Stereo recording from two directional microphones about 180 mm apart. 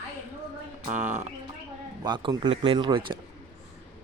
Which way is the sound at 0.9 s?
10° right (ahead or behind).